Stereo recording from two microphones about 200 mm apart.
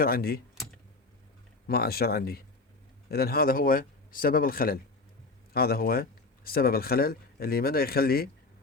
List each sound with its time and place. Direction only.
0.0 s speech: 50° left (ahead or behind)
1.6 s speech: 50° left (ahead or behind)